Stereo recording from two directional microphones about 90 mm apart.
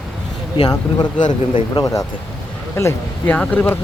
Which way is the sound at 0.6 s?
50° left (ahead or behind).